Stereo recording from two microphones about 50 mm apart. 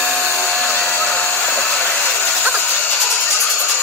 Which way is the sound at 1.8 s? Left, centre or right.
Left.